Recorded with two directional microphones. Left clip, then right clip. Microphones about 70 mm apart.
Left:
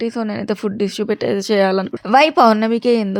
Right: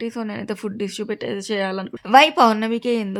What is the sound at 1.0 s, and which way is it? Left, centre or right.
Speech, left.